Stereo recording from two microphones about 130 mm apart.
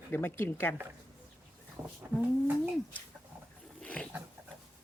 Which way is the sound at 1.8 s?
10° right (ahead or behind).